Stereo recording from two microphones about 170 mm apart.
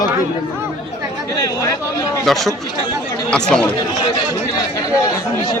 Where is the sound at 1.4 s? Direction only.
20° left (ahead or behind).